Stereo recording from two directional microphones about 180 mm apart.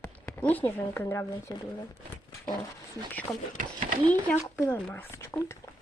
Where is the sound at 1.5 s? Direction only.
25° left (ahead or behind).